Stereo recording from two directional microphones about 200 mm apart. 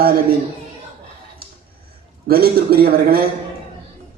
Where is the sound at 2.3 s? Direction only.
50° right (ahead or behind).